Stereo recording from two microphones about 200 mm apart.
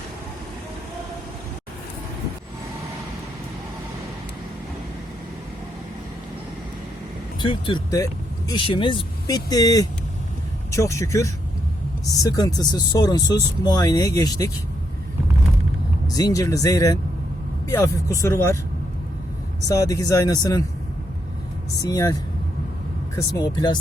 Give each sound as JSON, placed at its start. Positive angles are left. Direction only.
{"t": 7.3, "sound": "speech", "side_deg": 25}
{"t": 16.0, "sound": "speech", "side_deg": 20}
{"t": 19.6, "sound": "speech", "side_deg": 15}
{"t": 21.8, "sound": "speech", "side_deg": 20}